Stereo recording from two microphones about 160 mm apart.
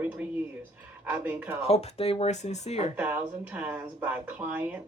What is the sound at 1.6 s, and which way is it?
Speech, 40° left (ahead or behind).